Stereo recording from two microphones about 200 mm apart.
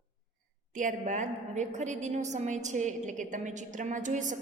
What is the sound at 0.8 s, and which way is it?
A woman's voice, 40° right (ahead or behind).